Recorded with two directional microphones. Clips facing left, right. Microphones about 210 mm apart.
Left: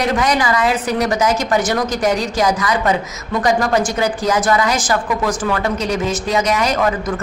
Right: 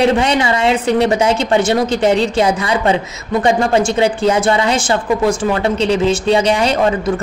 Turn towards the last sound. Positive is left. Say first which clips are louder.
# right 3 dB
turn(degrees=-30)  # may be behind; listen again after turning